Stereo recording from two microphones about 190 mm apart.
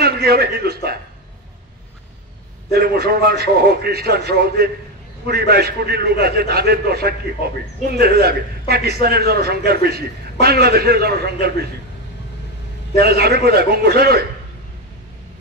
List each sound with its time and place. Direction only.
0.0 s a sound: 55° right (ahead or behind)
2.7 s a man's voice: 55° right (ahead or behind)
12.9 s a man's voice: 55° right (ahead or behind)